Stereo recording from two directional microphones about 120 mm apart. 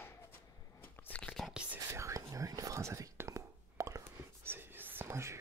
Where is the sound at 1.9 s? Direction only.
25° right (ahead or behind).